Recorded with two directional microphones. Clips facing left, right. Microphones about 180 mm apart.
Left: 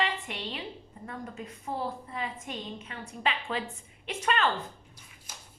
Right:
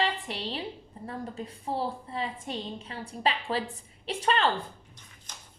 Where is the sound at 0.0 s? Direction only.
35° right (ahead or behind).